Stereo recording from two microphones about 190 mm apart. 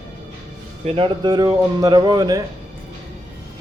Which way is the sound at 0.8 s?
25° right (ahead or behind).